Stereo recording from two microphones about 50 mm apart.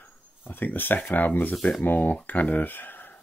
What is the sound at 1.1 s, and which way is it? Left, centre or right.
Speech, left.